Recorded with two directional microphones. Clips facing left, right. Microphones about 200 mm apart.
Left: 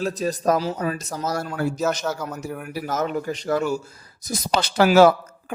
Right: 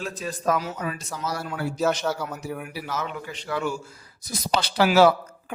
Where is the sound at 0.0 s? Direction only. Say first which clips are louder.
Left 5 dB; 40° left (ahead or behind).